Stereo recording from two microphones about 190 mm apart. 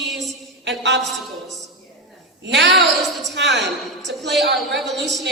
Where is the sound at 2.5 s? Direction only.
65° right (ahead or behind).